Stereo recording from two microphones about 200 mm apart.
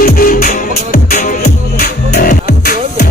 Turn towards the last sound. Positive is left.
turn(degrees=45)  # may be behind; listen again after turning